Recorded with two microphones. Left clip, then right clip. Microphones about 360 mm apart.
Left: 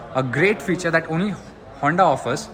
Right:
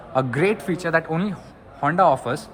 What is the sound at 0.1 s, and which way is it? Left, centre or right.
A man's voice, centre.